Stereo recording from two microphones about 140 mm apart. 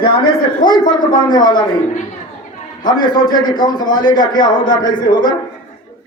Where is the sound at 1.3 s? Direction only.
30° left (ahead or behind).